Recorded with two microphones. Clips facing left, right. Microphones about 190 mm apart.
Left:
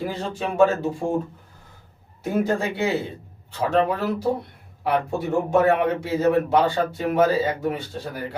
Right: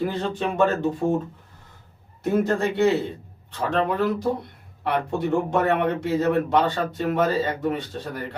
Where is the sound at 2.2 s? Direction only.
10° left (ahead or behind).